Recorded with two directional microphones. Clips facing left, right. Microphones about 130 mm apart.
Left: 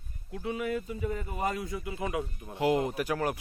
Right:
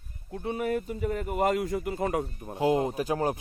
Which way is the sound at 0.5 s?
45° right (ahead or behind).